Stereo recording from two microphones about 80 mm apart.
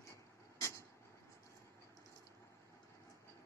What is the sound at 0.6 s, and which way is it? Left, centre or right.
Vehicle, left.